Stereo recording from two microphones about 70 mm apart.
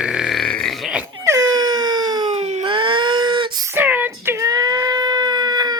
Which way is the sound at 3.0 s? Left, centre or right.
Right.